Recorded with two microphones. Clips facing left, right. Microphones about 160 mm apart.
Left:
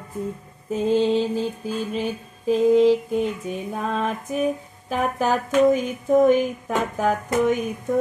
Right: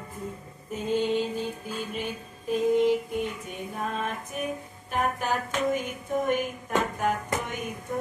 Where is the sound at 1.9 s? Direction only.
90° left.